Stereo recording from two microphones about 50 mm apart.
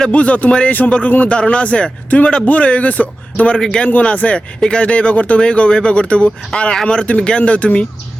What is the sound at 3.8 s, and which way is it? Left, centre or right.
Speech, left.